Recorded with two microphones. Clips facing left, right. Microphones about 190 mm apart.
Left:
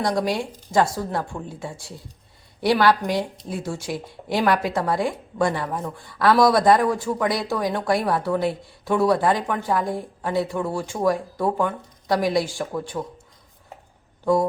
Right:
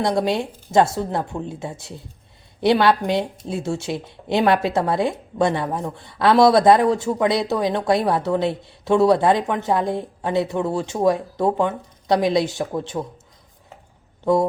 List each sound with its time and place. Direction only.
0.0 s speech: 25° right (ahead or behind)
14.3 s speech: 20° right (ahead or behind)